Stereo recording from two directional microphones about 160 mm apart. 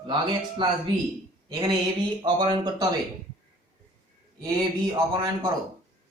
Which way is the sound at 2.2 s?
30° right (ahead or behind).